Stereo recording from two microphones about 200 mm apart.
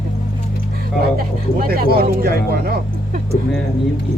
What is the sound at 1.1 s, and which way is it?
Speech, 50° right (ahead or behind).